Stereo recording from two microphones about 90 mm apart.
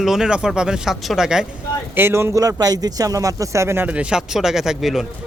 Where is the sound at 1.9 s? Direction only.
25° right (ahead or behind).